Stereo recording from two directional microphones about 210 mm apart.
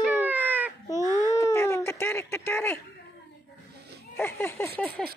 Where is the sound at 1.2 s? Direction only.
15° left (ahead or behind).